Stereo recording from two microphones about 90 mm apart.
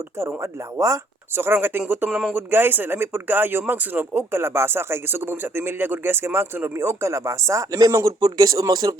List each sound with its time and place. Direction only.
0.2 s speech: 30° right (ahead or behind)
2.0 s speech: 5° right (ahead or behind)
2.3 s speech: 25° right (ahead or behind); by 9.0 s 45° right (ahead or behind)